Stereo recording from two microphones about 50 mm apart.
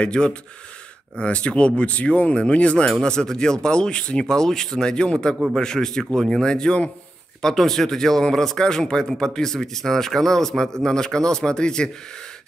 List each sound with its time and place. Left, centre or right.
0.0 s speech: centre
3.0 s a man's voice: centre
7.4 s a man's voice: centre